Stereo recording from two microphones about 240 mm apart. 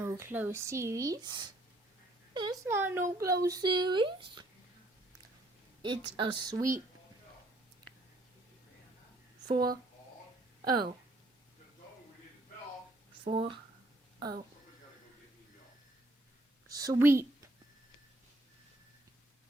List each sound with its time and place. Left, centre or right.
0.0 s speech: centre
6.1 s speech: centre
10.6 s speech: centre
13.2 s speech: right
16.6 s a woman's voice: centre